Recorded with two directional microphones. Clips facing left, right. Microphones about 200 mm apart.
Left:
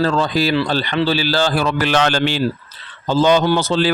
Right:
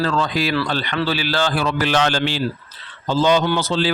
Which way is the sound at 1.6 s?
60° left (ahead or behind).